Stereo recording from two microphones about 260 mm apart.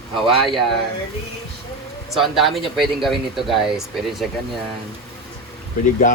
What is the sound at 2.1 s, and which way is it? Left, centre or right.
Speech, centre.